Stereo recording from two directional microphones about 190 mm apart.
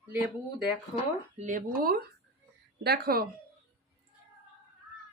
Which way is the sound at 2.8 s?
55° right (ahead or behind).